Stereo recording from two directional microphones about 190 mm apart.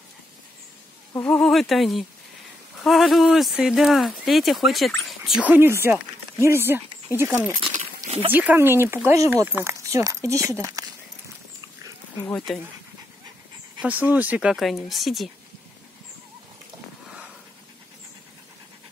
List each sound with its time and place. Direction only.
1.1 s speech: 5° left (ahead or behind); by 6.8 s 10° right (ahead or behind)
7.7 s wild animals: 40° right (ahead or behind)
8.3 s speech: 10° right (ahead or behind)
12.3 s speech: centre (ahead or behind)
13.7 s speech: 10° right (ahead or behind)